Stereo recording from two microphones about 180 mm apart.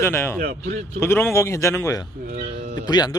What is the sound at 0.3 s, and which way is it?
Speech, 55° right (ahead or behind).